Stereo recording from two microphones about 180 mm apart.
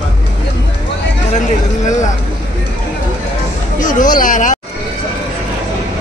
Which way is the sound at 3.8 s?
45° left (ahead or behind).